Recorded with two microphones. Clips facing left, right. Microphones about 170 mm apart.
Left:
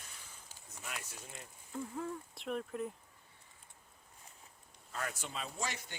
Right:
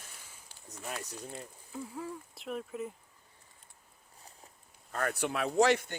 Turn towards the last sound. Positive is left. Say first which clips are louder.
# right 16 dB
turn(degrees=-65)  # may be behind; listen again after turning